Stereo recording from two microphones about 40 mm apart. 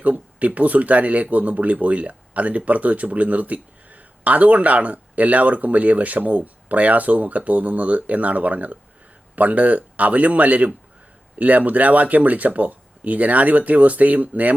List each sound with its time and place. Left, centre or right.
0.0 s speech: right